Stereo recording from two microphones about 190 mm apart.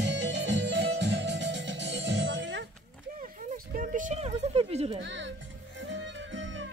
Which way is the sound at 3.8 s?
40° right (ahead or behind).